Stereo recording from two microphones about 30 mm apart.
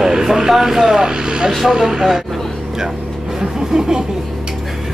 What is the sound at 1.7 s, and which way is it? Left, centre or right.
Vehicle, centre.